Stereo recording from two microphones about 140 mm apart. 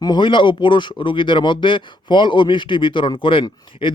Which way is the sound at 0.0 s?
35° left (ahead or behind).